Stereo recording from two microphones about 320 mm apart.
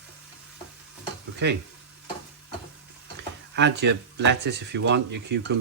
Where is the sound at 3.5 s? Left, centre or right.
Right.